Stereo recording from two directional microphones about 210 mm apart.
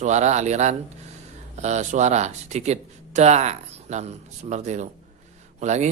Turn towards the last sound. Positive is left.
turn(degrees=-35)  # may be behind; listen again after turning